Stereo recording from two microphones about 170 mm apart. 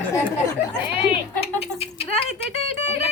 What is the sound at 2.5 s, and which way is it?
Music, 40° left (ahead or behind).